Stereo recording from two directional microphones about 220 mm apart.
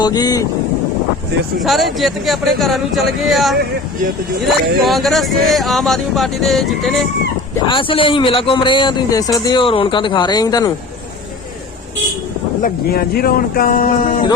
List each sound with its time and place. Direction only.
0.0 s speech: 15° left (ahead or behind)
1.6 s speech: centre (ahead or behind)
4.8 s speech: centre (ahead or behind)
7.7 s a man's voice: 25° left (ahead or behind)
12.6 s speech: 45° left (ahead or behind)